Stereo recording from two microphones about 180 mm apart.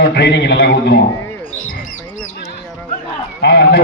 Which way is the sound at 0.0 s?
70° left (ahead or behind).